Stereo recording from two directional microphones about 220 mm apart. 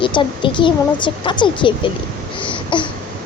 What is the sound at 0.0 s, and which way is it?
A woman's voice, 20° left (ahead or behind).